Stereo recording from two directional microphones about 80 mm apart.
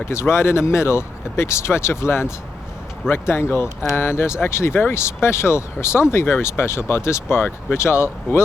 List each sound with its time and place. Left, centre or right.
0.0 s speech: left